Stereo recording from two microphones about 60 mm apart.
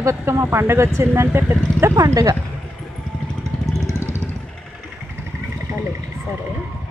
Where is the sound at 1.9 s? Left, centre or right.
Right.